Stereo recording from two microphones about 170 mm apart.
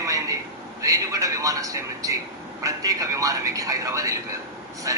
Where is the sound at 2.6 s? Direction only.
20° right (ahead or behind).